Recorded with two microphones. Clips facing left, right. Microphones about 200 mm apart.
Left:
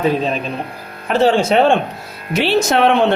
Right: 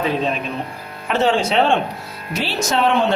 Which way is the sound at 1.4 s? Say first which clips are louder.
Left 4 dB; 50° left (ahead or behind).